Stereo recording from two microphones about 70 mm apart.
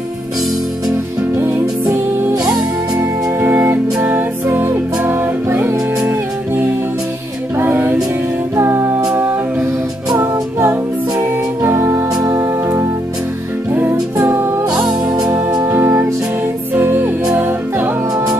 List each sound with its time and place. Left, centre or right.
1.4 s music: right
3.0 s music: right
14.2 s music: right
14.7 s music: centre
15.6 s music: right